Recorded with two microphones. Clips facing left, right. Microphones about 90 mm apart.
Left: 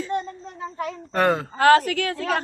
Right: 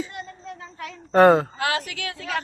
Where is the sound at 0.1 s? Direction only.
35° left (ahead or behind).